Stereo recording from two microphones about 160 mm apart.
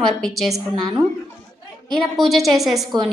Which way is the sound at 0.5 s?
20° right (ahead or behind).